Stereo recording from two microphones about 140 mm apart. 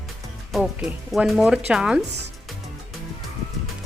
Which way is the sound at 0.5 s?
5° right (ahead or behind).